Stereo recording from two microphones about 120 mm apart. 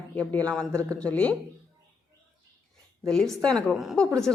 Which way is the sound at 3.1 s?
5° left (ahead or behind).